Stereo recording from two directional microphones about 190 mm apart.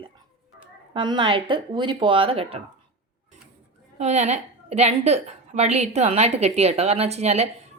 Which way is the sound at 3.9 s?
35° right (ahead or behind).